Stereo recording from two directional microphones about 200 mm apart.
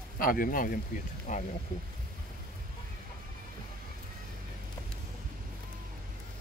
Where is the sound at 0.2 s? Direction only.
45° left (ahead or behind).